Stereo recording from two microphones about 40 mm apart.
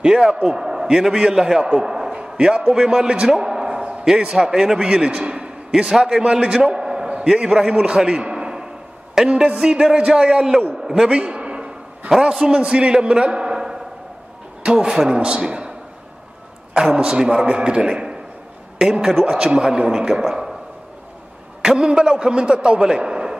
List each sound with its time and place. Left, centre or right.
0.0 s a man's voice: centre
3.2 s a sound: right
4.0 s a man's voice: centre
4.8 s a man's voice: right
8.0 s a sound: right
9.2 s a man's voice: right
9.6 s a man's voice: centre
11.1 s a sound: right
12.1 s a man's voice: centre
16.7 s a man's voice: right
18.8 s a man's voice: centre
19.5 s a man's voice: right
21.6 s a man's voice: centre